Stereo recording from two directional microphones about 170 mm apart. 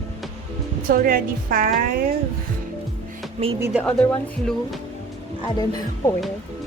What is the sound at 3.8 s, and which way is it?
Speech, 10° left (ahead or behind).